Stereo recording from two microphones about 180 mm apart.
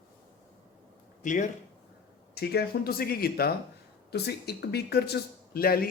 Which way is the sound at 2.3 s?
65° left (ahead or behind).